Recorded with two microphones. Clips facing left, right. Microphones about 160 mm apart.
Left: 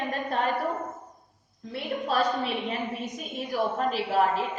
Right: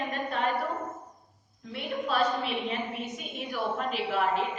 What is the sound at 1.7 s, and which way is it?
A woman's voice, 40° left (ahead or behind).